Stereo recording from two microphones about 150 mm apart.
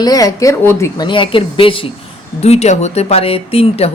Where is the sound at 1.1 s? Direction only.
35° left (ahead or behind).